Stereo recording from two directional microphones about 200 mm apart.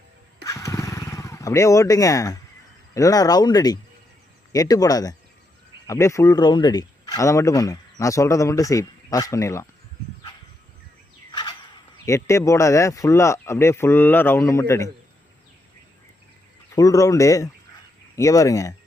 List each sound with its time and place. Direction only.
0.4 s motorcycle: 15° left (ahead or behind)
2.9 s speech: 15° left (ahead or behind)
11.3 s a sound: 20° left (ahead or behind)
12.0 s speech: 15° left (ahead or behind)
16.7 s speech: 15° left (ahead or behind)